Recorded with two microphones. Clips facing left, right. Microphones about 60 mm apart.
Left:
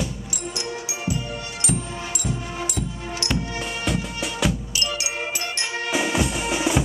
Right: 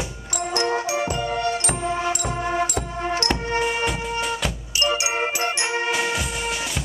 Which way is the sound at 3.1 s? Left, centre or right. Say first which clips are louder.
Right 3 dB; right.